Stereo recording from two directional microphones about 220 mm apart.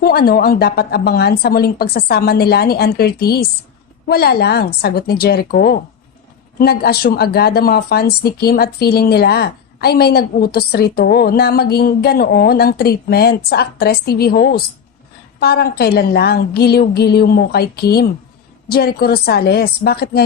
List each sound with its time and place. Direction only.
0.0 s speech: 45° left (ahead or behind)